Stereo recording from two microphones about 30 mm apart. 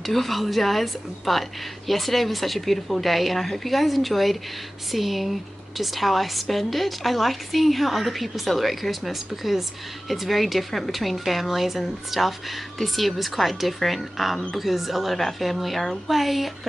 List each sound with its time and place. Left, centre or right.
0.0 s a woman's voice: centre